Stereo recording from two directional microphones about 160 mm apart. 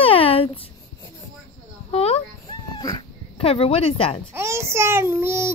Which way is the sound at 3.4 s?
35° left (ahead or behind).